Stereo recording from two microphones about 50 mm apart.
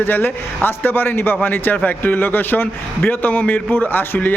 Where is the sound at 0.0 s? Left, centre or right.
Left.